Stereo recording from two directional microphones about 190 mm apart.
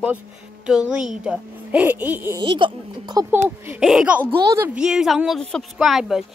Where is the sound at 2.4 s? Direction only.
25° right (ahead or behind).